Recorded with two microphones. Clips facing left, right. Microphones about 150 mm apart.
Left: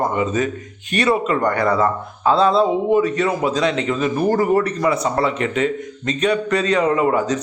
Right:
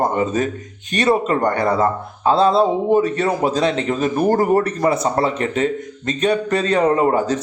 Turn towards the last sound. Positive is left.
turn(degrees=-30)  # may be behind; listen again after turning